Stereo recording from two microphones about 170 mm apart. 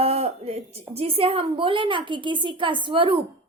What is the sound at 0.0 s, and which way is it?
A woman's voice, 40° right (ahead or behind).